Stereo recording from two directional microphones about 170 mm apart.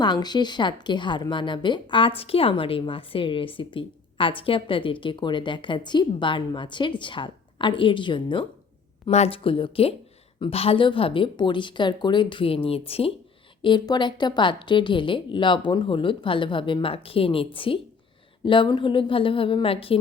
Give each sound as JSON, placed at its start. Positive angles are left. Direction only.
{"t": 0.0, "sound": "speech", "side_deg": 25}